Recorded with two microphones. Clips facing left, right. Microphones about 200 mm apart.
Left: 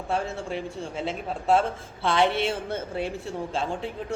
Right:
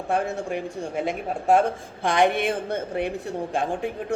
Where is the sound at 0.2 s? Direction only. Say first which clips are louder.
Right 4 dB; 15° right (ahead or behind).